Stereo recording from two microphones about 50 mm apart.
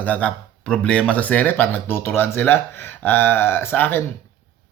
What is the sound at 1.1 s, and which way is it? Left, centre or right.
Speech, left.